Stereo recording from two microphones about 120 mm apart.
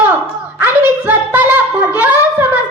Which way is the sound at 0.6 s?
15° right (ahead or behind).